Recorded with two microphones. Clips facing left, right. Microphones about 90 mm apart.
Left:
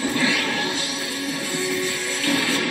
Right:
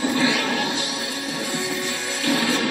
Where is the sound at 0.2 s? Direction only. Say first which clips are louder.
Right 2 dB; 25° right (ahead or behind).